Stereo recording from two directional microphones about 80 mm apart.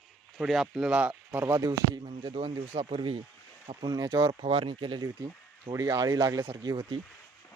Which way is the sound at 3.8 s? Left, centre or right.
Right.